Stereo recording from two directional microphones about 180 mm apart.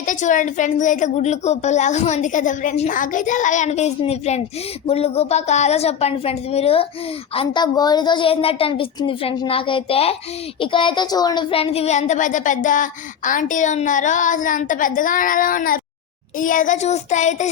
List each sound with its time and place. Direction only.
0.0 s a woman's voice: 45° left (ahead or behind)